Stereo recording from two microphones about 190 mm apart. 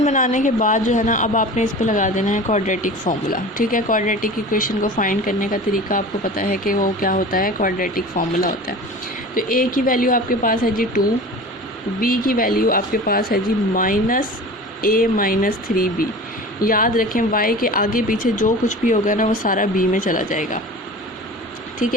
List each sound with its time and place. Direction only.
0.0 s a woman's voice: 40° left (ahead or behind)
21.8 s speech: 45° left (ahead or behind)